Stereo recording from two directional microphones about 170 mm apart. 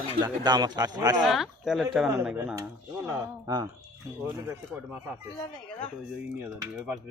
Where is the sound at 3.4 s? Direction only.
25° right (ahead or behind).